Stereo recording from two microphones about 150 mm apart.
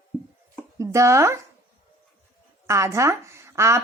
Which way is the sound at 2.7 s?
20° right (ahead or behind).